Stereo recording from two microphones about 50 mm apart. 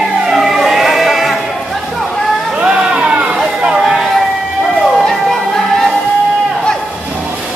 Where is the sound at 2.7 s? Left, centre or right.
Centre.